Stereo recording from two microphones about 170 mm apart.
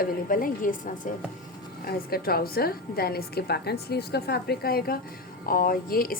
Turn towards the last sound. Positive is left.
turn(degrees=60)  # may be behind; listen again after turning